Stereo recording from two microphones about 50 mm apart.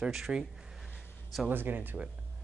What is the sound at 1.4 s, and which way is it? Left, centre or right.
Speech, right.